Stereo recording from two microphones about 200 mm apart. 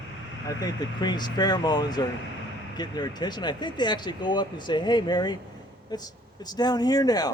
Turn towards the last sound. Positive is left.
turn(degrees=20)  # may be behind; listen again after turning